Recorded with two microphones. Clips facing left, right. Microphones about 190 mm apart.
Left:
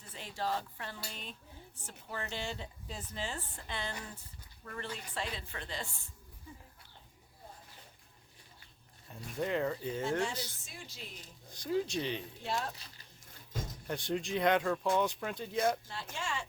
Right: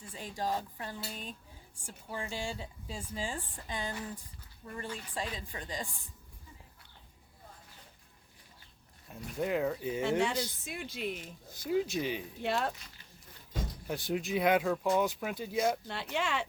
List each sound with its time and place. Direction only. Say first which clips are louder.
0.3 s a woman's voice: right 1 dB; 15° right (ahead or behind)
1.0 s a woman's voice: right 4 dB; 40° right (ahead or behind)
1.8 s a woman's voice: right 2 dB; 10° right (ahead or behind)
9.0 s speech: right 2 dB; 5° right (ahead or behind)
10.0 s speech: right 4 dB; 65° right (ahead or behind)
10.3 s a woman's voice: right 7 dB; 15° right (ahead or behind)
10.6 s speech: right 11 dB; 60° right (ahead or behind)
11.5 s a woman's voice: right 2 dB; 5° right (ahead or behind)
12.4 s speech: right 7 dB; 65° right (ahead or behind)
13.8 s speech: right 1 dB; 5° right (ahead or behind)
15.9 s speech: right 6 dB; 65° right (ahead or behind)